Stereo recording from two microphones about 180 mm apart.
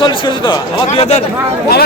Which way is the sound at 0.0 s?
30° left (ahead or behind).